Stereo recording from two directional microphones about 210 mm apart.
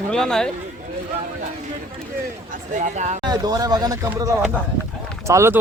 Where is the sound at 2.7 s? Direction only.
35° right (ahead or behind).